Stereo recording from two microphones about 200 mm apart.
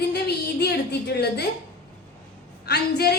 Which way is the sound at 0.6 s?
55° left (ahead or behind).